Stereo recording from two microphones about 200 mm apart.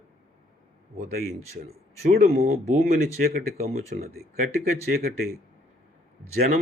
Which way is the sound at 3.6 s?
35° right (ahead or behind).